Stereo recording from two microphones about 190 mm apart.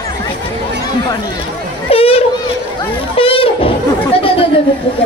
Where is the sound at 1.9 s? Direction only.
30° left (ahead or behind).